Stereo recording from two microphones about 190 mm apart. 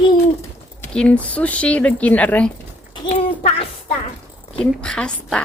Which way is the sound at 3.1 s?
30° left (ahead or behind).